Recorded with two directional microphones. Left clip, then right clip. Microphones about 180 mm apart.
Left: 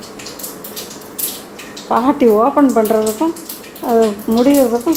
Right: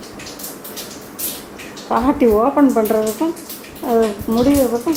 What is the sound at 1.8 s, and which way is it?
Speech, 10° left (ahead or behind).